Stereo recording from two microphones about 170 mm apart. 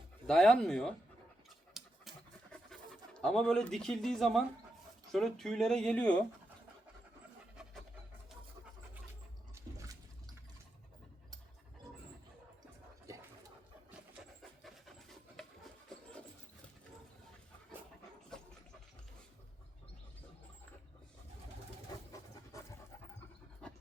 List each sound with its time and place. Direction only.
0.3 s speech: 5° left (ahead or behind)
1.7 s pant: centre (ahead or behind)
5.1 s speech: centre (ahead or behind)
7.5 s pant: 5° right (ahead or behind)
9.7 s water: 20° right (ahead or behind)
13.1 s a sound: 20° right (ahead or behind)
14.6 s pant: centre (ahead or behind)
18.3 s dog: 5° left (ahead or behind)
22.5 s pant: 20° left (ahead or behind)
23.6 s pant: 5° left (ahead or behind)